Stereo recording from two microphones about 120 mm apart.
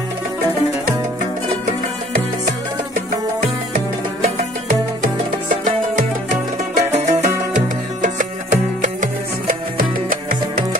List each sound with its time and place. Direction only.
6.7 s music: 70° right (ahead or behind); by 9.1 s 90° right